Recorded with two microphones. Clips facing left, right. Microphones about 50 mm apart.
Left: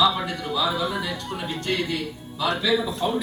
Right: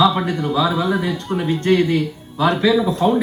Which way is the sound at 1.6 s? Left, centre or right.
Right.